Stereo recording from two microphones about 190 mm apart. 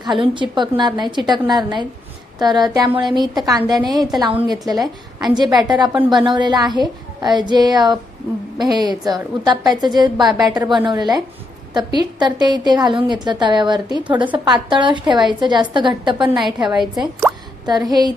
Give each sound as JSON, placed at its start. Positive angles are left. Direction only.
{"t": 0.0, "sound": "a woman's voice", "side_deg": -25}
{"t": 16.6, "sound": "speech", "side_deg": 0}
{"t": 17.7, "sound": "a woman's voice", "side_deg": -20}